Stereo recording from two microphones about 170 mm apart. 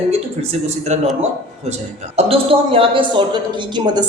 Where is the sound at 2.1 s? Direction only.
35° right (ahead or behind).